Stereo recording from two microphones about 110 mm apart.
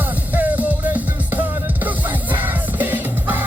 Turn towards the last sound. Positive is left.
turn(degrees=-15)  # may be behind; listen again after turning